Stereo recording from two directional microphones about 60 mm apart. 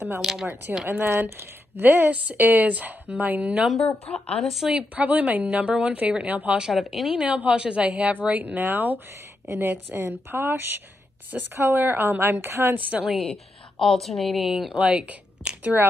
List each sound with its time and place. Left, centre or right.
0.2 s speech: centre
0.8 s speech: right
3.5 s a woman's voice: centre
4.6 s speech: right
6.7 s a woman's voice: centre
7.2 s speech: right
13.1 s a woman's voice: centre
14.7 s speech: centre